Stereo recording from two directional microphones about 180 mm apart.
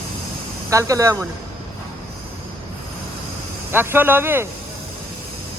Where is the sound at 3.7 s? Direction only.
10° right (ahead or behind).